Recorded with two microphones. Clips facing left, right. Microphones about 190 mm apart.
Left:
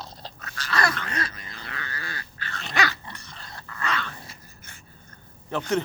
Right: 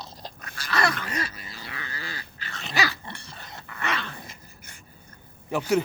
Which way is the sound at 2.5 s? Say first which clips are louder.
Left 1 dB; 5° right (ahead or behind).